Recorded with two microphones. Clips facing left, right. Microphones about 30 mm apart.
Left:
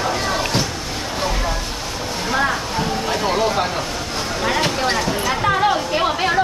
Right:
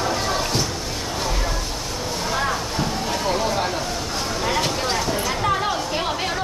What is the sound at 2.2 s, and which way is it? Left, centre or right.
Speech, centre.